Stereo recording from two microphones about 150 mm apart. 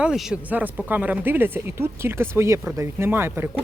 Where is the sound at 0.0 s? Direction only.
5° right (ahead or behind).